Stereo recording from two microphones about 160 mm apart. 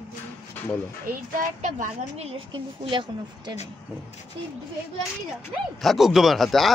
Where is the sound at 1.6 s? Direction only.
50° right (ahead or behind).